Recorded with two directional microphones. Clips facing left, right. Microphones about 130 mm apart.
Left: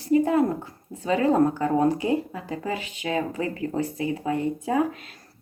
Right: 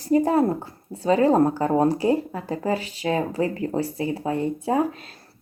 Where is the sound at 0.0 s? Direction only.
35° right (ahead or behind).